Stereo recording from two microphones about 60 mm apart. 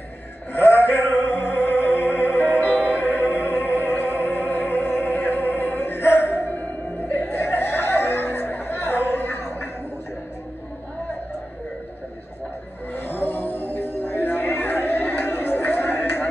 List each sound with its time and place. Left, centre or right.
0.5 s music: left
12.9 s music: left